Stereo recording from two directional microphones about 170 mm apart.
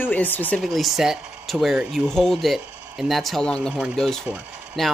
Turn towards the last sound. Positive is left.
turn(degrees=0)  # may be behind; listen again after turning